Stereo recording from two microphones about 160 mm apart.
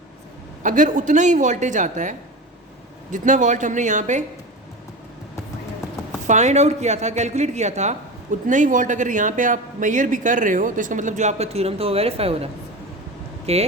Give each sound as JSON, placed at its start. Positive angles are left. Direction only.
{"t": 0.6, "sound": "speech", "side_deg": -55}
{"t": 6.2, "sound": "speech", "side_deg": -45}